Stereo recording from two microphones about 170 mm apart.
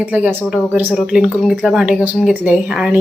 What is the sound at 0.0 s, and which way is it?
Speech, 10° right (ahead or behind).